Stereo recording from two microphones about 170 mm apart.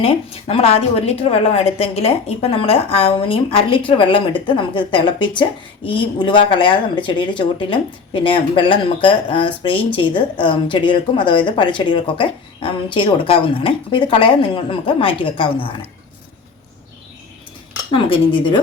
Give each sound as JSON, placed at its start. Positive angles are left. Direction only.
{"t": 0.0, "sound": "speech", "side_deg": 35}
{"t": 17.9, "sound": "speech", "side_deg": 30}